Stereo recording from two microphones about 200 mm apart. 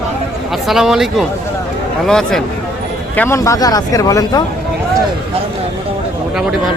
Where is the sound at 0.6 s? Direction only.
Centre (ahead or behind); by 4.4 s 15° left (ahead or behind).